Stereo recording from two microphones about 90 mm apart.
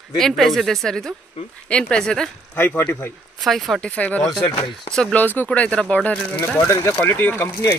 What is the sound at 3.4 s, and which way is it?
Speech, centre (ahead or behind).